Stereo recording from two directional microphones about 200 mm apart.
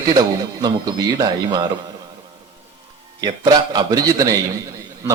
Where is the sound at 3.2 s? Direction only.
20° right (ahead or behind).